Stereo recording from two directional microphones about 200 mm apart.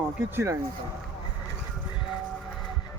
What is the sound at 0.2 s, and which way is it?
Speech, 15° right (ahead or behind).